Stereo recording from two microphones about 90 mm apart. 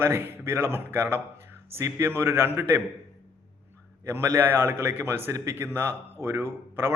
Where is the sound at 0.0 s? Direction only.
25° right (ahead or behind).